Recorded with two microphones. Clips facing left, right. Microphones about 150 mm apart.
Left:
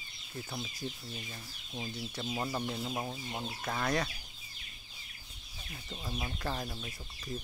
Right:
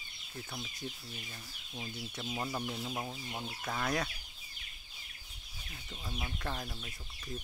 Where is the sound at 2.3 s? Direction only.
5° left (ahead or behind).